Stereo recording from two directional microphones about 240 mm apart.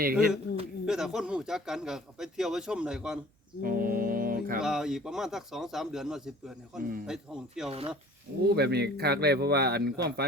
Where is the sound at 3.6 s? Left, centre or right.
Right.